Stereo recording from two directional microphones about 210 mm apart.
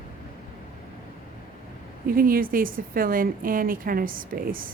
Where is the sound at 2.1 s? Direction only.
45° right (ahead or behind).